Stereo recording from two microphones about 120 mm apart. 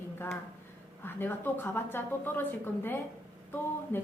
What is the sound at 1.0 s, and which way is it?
A woman's voice, 15° left (ahead or behind).